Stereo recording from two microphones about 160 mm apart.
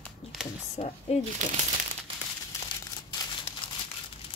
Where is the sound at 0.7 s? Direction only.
40° left (ahead or behind).